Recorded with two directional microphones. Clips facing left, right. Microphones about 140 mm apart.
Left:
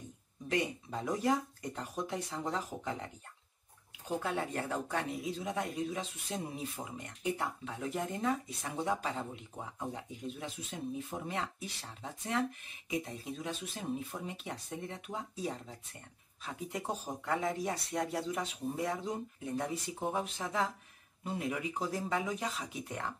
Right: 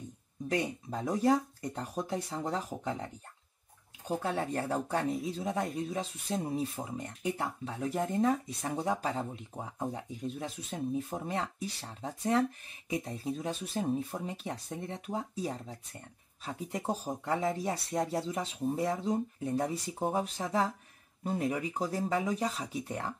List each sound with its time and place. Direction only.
0.5 s speech: 40° right (ahead or behind)
4.2 s speech: 35° right (ahead or behind)